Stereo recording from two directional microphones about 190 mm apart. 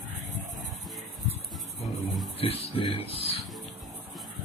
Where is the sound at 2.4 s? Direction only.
30° left (ahead or behind).